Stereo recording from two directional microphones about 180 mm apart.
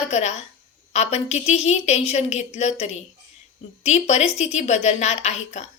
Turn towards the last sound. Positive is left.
turn(degrees=40)  # may be behind; listen again after turning